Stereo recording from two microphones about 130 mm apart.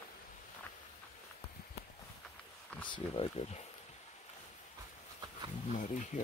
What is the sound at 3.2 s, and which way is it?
Speech, 45° left (ahead or behind).